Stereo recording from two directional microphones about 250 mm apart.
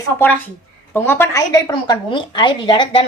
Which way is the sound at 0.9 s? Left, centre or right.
Centre.